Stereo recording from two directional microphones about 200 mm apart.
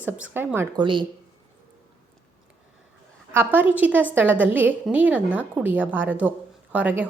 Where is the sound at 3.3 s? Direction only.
10° right (ahead or behind).